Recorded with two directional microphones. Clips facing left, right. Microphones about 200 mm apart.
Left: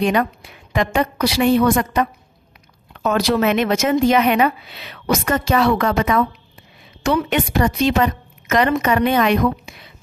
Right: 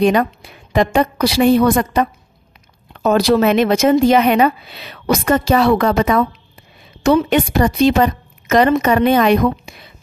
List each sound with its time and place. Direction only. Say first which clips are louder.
0.0 s speech: right 4 dB; 35° right (ahead or behind)